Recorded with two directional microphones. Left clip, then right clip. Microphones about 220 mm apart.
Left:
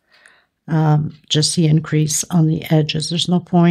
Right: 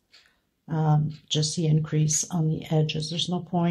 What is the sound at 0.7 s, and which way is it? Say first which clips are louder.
Speech: left 8 dB; 50° left (ahead or behind).